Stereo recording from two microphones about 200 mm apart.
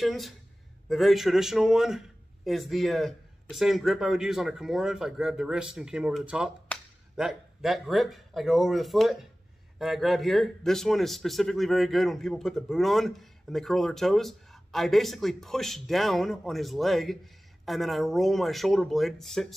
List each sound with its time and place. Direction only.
0.0 s speech: centre (ahead or behind)